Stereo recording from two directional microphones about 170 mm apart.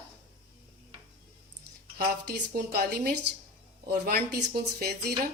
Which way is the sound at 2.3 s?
65° right (ahead or behind).